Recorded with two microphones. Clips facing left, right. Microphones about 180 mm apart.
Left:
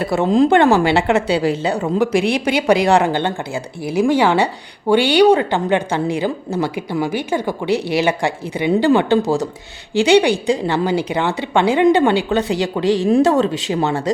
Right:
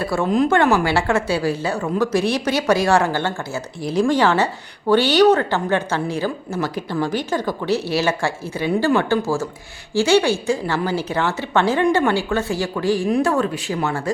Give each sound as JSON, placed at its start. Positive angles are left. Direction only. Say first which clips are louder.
{"t": 0.0, "sound": "a woman's voice", "louder": "left 4 dB", "side_deg": 20}